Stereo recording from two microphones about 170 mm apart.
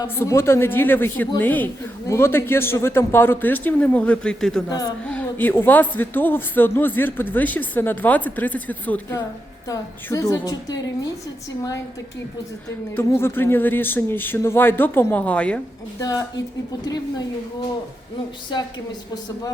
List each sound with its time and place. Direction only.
0.0 s speech: 15° left (ahead or behind)
4.7 s a woman's voice: 20° left (ahead or behind)
5.0 s a woman's voice: 10° left (ahead or behind)
13.0 s speech: 15° left (ahead or behind)
16.0 s a woman's voice: 20° left (ahead or behind)